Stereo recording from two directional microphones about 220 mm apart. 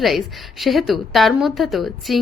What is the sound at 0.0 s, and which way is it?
A woman's voice, centre (ahead or behind).